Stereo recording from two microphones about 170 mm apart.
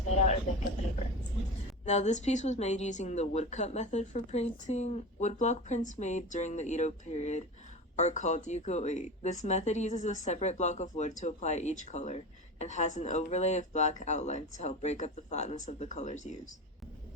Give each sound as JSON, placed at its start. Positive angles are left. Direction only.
{"t": 1.8, "sound": "speech", "side_deg": 45}